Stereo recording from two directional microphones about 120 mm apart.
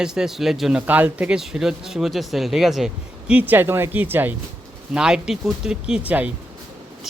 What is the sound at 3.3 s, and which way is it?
Speech, 15° right (ahead or behind).